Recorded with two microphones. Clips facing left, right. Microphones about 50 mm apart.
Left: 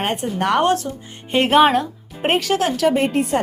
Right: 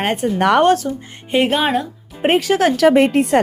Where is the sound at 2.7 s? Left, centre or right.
Right.